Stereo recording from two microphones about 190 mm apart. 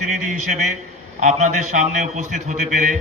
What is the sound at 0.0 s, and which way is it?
A man's voice, 40° right (ahead or behind).